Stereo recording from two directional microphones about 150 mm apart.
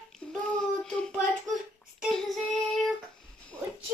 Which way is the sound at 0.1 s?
5° left (ahead or behind).